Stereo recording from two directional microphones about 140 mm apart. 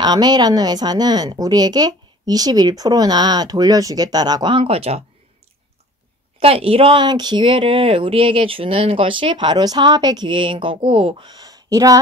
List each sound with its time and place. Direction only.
0.0 s speech: 30° right (ahead or behind); by 5.0 s 45° right (ahead or behind)
6.4 s speech: 45° right (ahead or behind); by 12.0 s 25° right (ahead or behind)